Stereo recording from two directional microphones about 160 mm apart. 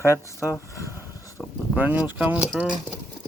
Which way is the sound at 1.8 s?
10° right (ahead or behind).